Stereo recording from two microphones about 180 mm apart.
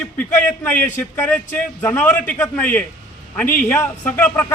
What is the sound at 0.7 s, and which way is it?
A man's voice, 10° left (ahead or behind).